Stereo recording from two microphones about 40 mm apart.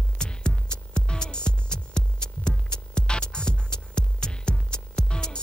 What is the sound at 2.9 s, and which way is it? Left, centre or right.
Music, left.